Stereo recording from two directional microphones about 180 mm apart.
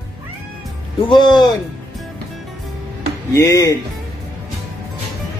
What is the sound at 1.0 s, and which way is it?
Speech, 25° left (ahead or behind).